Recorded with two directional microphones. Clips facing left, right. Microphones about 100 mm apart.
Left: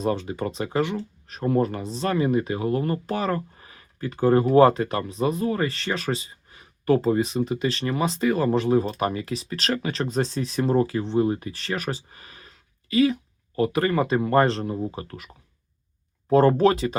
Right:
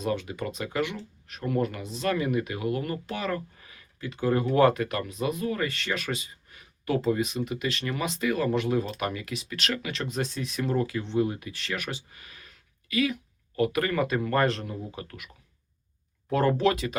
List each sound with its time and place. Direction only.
0.0 s speech: 35° left (ahead or behind)
16.3 s speech: 35° left (ahead or behind)